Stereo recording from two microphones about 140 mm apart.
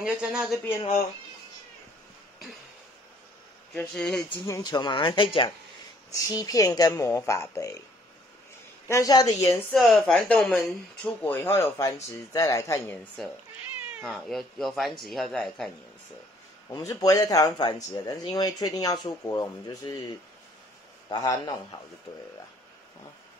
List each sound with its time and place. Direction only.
0.0 s speech: 5° right (ahead or behind)
3.7 s speech: 5° left (ahead or behind)
4.5 s speech: 25° left (ahead or behind)
6.1 s speech: 25° left (ahead or behind)
8.8 s speech: 25° left (ahead or behind)
9.7 s speech: centre (ahead or behind); by 12.9 s 20° left (ahead or behind)
14.0 s speech: centre (ahead or behind)
16.6 s speech: 25° left (ahead or behind)